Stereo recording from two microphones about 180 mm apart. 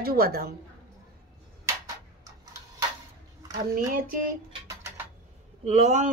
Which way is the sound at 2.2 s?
20° right (ahead or behind).